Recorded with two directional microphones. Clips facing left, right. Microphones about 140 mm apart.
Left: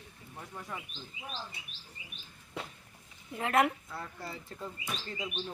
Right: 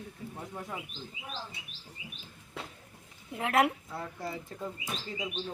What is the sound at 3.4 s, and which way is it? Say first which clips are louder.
Speech: right 1 dB; 10° right (ahead or behind).